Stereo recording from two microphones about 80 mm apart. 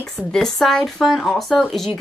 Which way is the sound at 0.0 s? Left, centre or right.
Centre.